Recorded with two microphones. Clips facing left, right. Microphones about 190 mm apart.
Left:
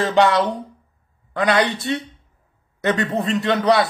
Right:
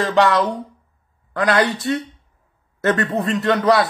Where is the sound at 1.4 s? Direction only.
20° left (ahead or behind).